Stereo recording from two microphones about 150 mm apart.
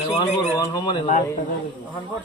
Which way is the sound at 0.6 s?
30° left (ahead or behind).